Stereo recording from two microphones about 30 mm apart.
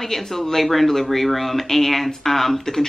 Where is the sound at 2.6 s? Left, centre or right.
Centre.